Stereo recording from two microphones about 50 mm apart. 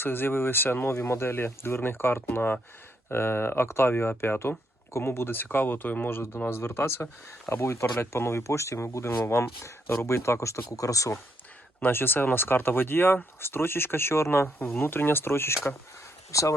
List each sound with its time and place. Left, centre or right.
0.0 s speech: left
9.2 s speech: left
9.9 s speech: left
10.7 s speech: left
11.8 s speech: left
16.3 s speech: left